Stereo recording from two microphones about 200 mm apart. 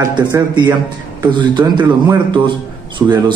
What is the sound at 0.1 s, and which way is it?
A man's voice, 20° right (ahead or behind).